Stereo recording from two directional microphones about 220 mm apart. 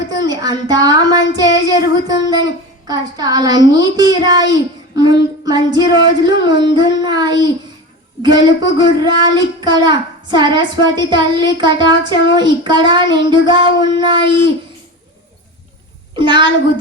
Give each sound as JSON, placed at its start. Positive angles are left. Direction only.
{"t": 0.1, "sound": "child singing", "side_deg": -20}
{"t": 4.5, "sound": "a child's voice", "side_deg": -15}
{"t": 16.1, "sound": "a child's voice", "side_deg": -20}